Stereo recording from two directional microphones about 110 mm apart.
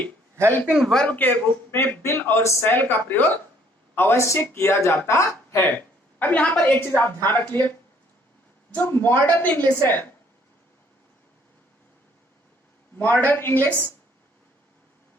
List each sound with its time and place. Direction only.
0.7 s a man's voice: centre (ahead or behind); by 7.5 s 15° left (ahead or behind)
8.9 s a man's voice: 20° left (ahead or behind)
13.0 s a man's voice: 15° left (ahead or behind)